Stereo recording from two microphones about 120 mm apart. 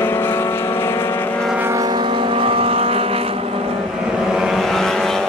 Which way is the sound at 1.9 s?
45° right (ahead or behind).